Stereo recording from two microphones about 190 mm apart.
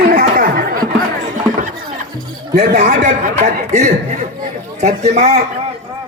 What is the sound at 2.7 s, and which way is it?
Speech, 40° right (ahead or behind).